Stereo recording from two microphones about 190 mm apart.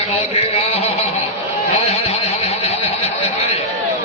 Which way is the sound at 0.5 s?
30° left (ahead or behind).